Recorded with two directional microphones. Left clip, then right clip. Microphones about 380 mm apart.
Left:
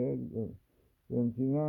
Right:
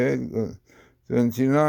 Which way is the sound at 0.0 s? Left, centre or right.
Right.